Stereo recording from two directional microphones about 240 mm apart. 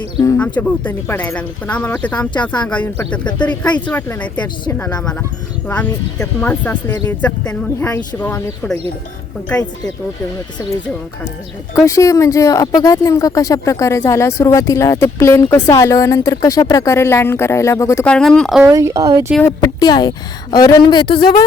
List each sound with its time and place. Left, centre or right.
0.2 s speech: centre
11.9 s speech: centre
18.6 s speech: centre
19.3 s speech: centre